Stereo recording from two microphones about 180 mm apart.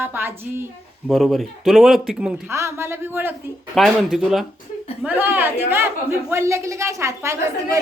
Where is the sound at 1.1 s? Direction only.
Centre (ahead or behind).